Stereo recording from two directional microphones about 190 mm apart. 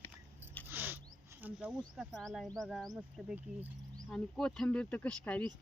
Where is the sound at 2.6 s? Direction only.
Centre (ahead or behind).